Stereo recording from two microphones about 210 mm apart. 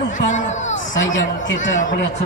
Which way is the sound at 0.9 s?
65° left (ahead or behind).